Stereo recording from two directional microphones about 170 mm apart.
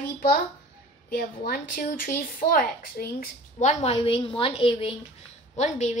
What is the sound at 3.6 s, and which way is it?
A woman's voice, 40° left (ahead or behind).